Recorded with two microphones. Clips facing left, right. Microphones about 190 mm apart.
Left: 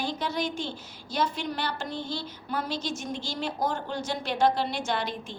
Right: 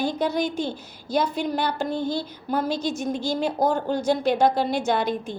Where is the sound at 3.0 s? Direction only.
45° right (ahead or behind).